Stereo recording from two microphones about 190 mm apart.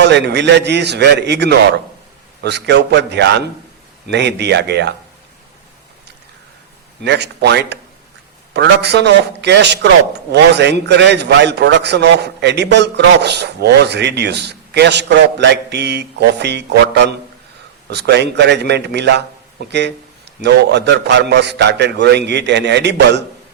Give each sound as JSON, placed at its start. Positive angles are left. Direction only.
{"t": 0.0, "sound": "a man's voice", "side_deg": -65}
{"t": 7.0, "sound": "a man's voice", "side_deg": -65}